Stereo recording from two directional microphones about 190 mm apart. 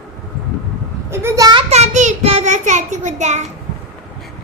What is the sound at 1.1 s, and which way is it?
Speech, 15° right (ahead or behind).